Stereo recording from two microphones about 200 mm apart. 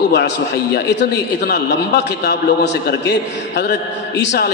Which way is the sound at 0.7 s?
60° left (ahead or behind).